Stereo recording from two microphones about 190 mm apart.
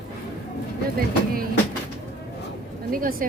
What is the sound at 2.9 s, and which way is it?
Speech, 50° right (ahead or behind).